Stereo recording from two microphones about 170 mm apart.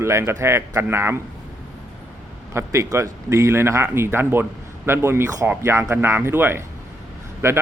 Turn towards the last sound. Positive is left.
turn(degrees=-15)  # may be behind; listen again after turning